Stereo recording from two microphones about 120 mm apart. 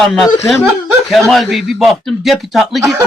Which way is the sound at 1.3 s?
Centre (ahead or behind).